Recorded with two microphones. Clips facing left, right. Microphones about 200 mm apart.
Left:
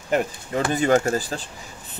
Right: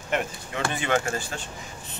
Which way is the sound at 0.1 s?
40° left (ahead or behind).